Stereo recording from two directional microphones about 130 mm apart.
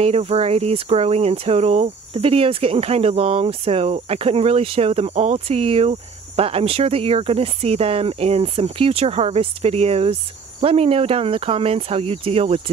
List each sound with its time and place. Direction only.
0.0 s speech: 50° right (ahead or behind)